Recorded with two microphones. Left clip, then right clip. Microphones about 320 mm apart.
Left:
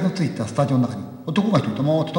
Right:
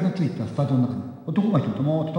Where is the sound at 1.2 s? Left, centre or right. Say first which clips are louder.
Left 4 dB; left.